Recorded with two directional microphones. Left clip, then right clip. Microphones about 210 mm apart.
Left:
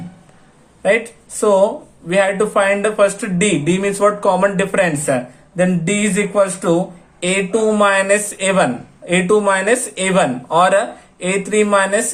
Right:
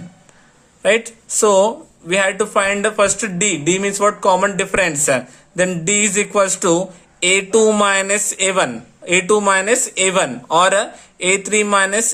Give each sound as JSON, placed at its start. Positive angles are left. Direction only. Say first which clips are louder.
{"t": 0.8, "sound": "speech", "louder": "even", "side_deg": -35}